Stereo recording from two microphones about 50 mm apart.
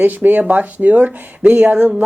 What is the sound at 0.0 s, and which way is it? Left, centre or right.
Speech, right.